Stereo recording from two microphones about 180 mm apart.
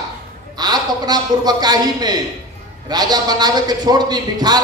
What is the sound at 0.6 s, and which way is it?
A man's voice, 20° right (ahead or behind).